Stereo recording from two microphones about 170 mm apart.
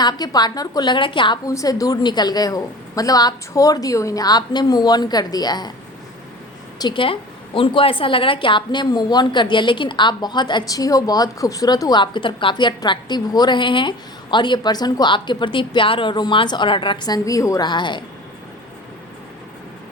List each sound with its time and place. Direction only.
0.0 s a woman's voice: 25° left (ahead or behind)
6.7 s a woman's voice: 25° left (ahead or behind)